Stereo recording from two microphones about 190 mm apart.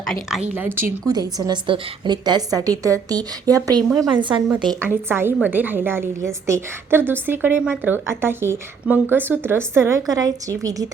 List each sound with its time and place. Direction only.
0.0 s a woman's voice: centre (ahead or behind)
0.5 s a woman's voice: 10° right (ahead or behind)
3.8 s a woman's voice: centre (ahead or behind)
4.1 s a woman's voice: 25° right (ahead or behind)
7.1 s a woman's voice: 10° right (ahead or behind)